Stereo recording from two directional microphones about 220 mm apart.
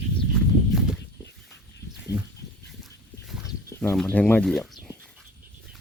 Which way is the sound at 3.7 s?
10° left (ahead or behind).